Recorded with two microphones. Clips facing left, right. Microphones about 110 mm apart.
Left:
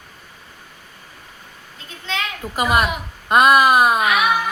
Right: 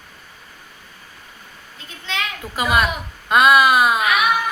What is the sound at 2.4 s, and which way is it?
Speech, 5° right (ahead or behind).